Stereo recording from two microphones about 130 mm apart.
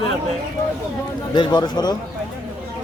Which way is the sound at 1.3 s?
35° left (ahead or behind).